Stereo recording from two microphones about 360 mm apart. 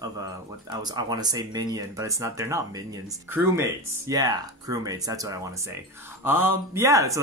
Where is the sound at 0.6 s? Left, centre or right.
Centre.